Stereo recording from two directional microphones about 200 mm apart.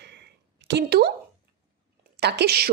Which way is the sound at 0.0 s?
60° right (ahead or behind).